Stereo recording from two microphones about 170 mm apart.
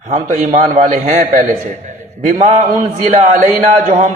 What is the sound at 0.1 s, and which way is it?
A man's voice, 45° right (ahead or behind).